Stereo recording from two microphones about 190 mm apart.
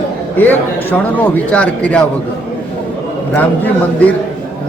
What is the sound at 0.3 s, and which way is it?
A man's voice, 10° left (ahead or behind).